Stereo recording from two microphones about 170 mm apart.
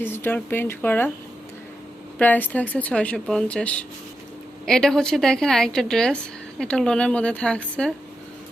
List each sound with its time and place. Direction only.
0.0 s speech: 10° left (ahead or behind)
2.1 s a woman's voice: 10° left (ahead or behind)